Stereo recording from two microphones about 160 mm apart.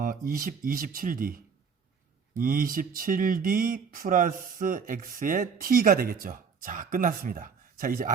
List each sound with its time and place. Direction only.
0.0 s speech: 60° right (ahead or behind)